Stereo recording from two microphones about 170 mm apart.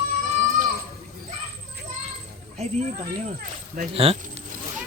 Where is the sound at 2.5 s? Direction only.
40° right (ahead or behind).